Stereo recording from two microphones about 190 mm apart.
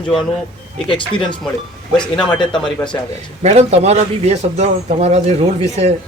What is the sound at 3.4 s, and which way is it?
Speech, 35° right (ahead or behind).